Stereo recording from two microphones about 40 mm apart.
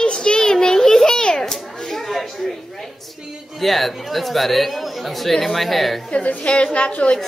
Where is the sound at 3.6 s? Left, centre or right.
Centre.